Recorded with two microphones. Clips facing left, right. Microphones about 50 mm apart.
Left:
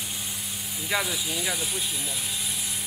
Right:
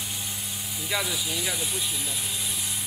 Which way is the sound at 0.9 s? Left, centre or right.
Centre.